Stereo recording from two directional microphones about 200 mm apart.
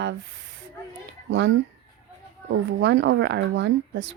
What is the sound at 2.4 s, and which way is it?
A woman's voice, 65° right (ahead or behind).